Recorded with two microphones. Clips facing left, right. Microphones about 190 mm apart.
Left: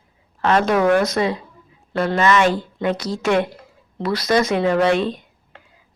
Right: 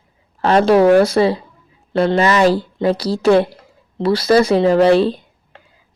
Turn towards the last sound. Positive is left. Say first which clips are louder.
# right 3 dB
turn(degrees=-35)  # may be behind; listen again after turning